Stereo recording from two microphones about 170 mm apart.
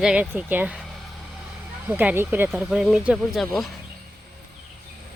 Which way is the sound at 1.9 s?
10° right (ahead or behind).